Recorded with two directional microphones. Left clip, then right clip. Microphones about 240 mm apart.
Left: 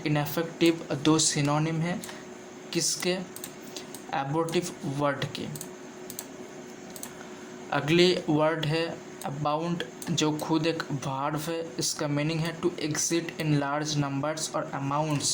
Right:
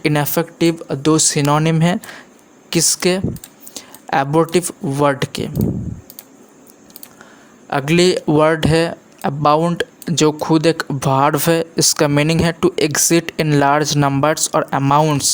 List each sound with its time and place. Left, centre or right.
0.0 s speech: right
7.7 s speech: right